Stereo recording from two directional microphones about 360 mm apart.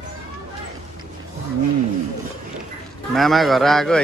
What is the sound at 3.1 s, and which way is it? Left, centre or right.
Speech, centre.